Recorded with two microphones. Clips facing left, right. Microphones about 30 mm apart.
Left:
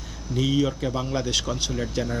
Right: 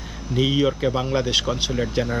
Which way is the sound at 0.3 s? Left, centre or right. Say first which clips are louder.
Right 3 dB; right.